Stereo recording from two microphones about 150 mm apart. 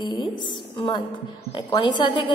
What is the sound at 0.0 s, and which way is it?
A woman's voice, 30° left (ahead or behind).